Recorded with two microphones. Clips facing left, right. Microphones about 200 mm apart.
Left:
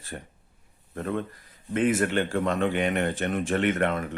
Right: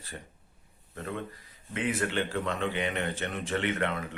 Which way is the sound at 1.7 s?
45° left (ahead or behind).